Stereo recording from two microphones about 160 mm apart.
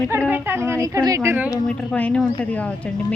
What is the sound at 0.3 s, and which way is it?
A woman's voice, 15° right (ahead or behind).